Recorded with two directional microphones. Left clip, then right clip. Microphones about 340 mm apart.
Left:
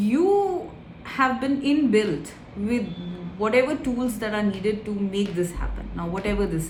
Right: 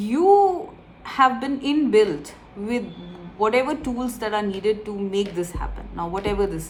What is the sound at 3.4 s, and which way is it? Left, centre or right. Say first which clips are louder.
A woman's voice: right 1 dB; centre.